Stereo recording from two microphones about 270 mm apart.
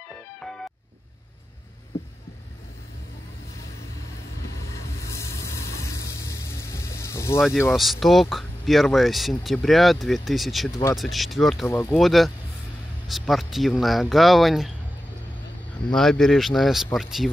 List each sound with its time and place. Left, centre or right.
5.0 s vehicle: centre
7.4 s speech: centre
10.7 s speech: centre
11.0 s speech: centre
15.9 s speech: centre